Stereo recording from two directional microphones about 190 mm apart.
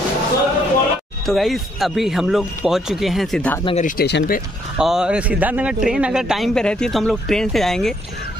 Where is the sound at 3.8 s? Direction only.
55° left (ahead or behind).